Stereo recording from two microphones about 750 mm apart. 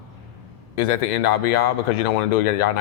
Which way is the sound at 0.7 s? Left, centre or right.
Left.